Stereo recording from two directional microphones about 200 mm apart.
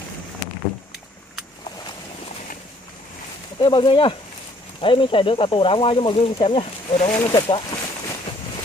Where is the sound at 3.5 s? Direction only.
25° left (ahead or behind).